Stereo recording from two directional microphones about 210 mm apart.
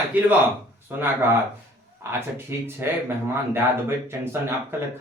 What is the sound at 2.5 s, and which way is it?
A man's voice, 10° right (ahead or behind).